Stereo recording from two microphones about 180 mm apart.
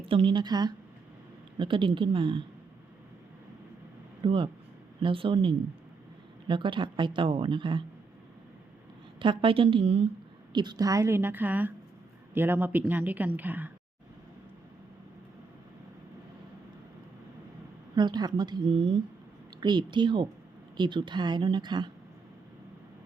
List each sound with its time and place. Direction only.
0.0 s speech: 30° right (ahead or behind)
4.2 s speech: 30° right (ahead or behind)
9.1 s a woman's voice: 25° right (ahead or behind); by 13.7 s 10° right (ahead or behind)
17.9 s speech: 25° right (ahead or behind)